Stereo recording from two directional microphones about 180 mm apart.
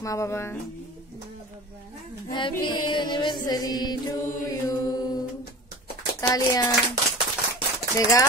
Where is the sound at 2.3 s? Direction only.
25° left (ahead or behind).